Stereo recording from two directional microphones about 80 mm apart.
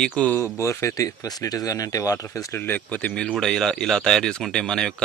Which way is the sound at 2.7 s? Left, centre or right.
Centre.